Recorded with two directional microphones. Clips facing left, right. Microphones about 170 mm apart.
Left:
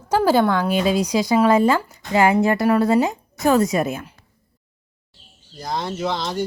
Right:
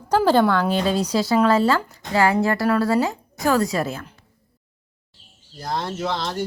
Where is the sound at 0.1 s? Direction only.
10° left (ahead or behind).